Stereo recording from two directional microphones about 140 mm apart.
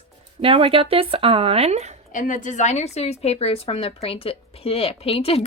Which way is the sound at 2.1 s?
70° left (ahead or behind).